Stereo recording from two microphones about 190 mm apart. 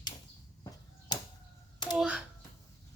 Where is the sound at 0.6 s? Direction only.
20° left (ahead or behind).